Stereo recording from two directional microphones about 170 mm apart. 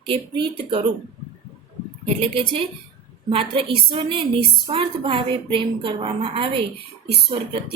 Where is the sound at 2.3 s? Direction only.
30° right (ahead or behind).